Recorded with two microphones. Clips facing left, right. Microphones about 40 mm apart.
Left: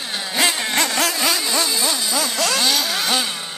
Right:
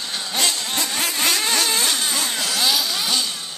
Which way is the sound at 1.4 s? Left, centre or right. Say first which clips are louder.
Even; right.